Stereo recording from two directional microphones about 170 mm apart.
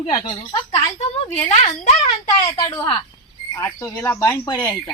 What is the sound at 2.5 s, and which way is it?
Speech, 25° left (ahead or behind).